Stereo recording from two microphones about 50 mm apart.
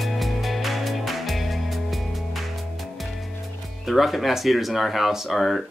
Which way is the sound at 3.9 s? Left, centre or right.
Centre.